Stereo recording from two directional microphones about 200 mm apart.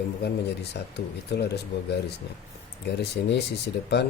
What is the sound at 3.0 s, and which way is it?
Speech, 55° left (ahead or behind).